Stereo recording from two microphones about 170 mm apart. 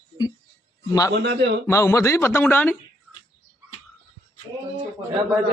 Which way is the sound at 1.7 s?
15° left (ahead or behind).